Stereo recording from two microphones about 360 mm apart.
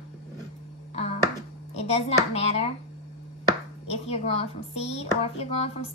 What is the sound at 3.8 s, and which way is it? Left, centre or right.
A woman's voice, centre.